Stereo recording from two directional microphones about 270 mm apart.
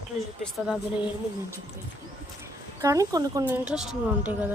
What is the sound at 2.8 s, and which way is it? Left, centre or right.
Speech, centre.